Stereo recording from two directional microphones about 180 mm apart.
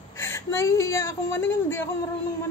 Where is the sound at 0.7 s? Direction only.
15° left (ahead or behind).